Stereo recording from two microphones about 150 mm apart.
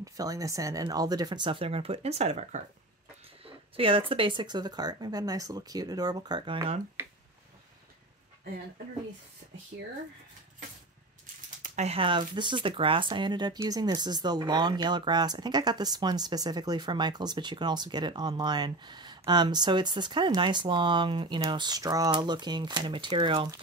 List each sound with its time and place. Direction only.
0.0 s speech: 25° right (ahead or behind)
11.6 s speech: 50° right (ahead or behind); by 23.5 s 30° right (ahead or behind)